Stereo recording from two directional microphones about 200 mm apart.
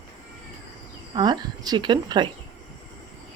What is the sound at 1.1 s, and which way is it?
Speech, 20° right (ahead or behind).